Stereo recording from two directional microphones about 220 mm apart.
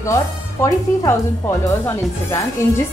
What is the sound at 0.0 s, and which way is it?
A woman's voice, 15° left (ahead or behind).